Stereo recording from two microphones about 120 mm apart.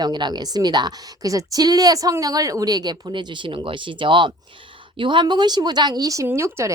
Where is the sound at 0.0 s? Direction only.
35° right (ahead or behind).